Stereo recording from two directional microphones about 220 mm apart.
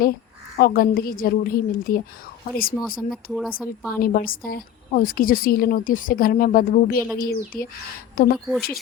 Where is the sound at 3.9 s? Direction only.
40° left (ahead or behind).